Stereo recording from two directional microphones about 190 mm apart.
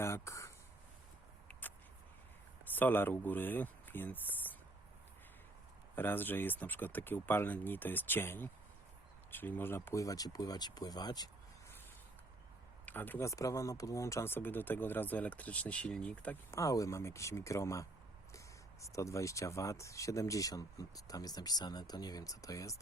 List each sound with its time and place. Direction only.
0.0 s speech: 15° left (ahead or behind)
2.7 s speech: 10° left (ahead or behind)
6.0 s speech: 10° left (ahead or behind)
12.8 s speech: 10° left (ahead or behind)